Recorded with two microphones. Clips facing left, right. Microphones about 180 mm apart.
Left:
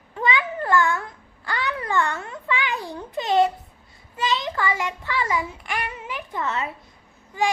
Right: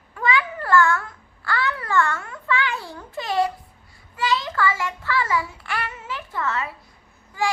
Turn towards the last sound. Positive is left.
turn(degrees=20)  # may be behind; listen again after turning